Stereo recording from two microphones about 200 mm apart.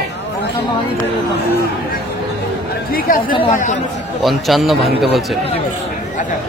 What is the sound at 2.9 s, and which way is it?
Speech, 45° left (ahead or behind).